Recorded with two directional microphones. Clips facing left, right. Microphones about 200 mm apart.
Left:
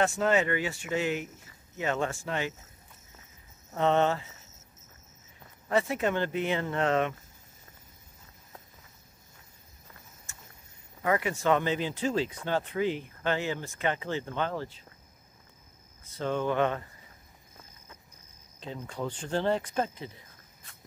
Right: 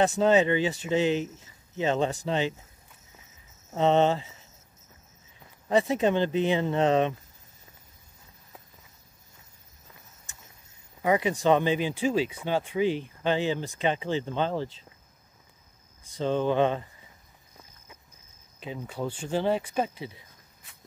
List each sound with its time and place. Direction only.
0.0 s speech: 20° right (ahead or behind)
3.7 s speech: 20° right (ahead or behind)
5.7 s speech: 20° right (ahead or behind)
11.0 s speech: 15° right (ahead or behind)
16.0 s speech: 20° right (ahead or behind)
18.8 s speech: 5° right (ahead or behind)